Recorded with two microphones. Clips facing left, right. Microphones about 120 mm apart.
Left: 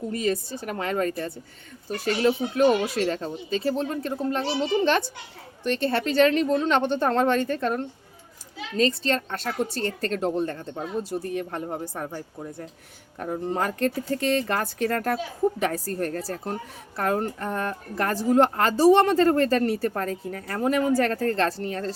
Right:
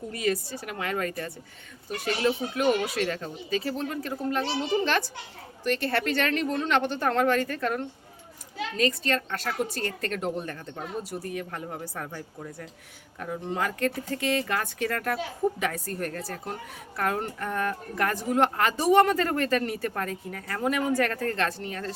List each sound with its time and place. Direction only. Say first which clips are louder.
0.1 s a woman's voice: left 1 dB; 25° left (ahead or behind)
5.6 s a woman's voice: left 2 dB; 25° left (ahead or behind)
13.1 s a woman's voice: left 4 dB; 35° left (ahead or behind)